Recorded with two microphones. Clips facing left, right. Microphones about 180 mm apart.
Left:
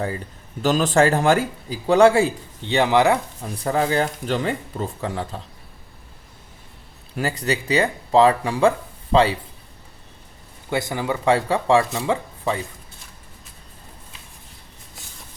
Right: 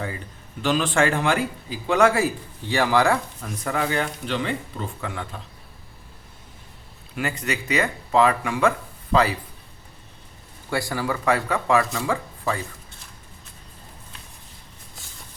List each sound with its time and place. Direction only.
0.6 s speech: 40° left (ahead or behind)
1.9 s speech: 30° left (ahead or behind)
3.5 s speech: 35° left (ahead or behind)
7.2 s speech: 35° left (ahead or behind)
10.7 s speech: 20° left (ahead or behind)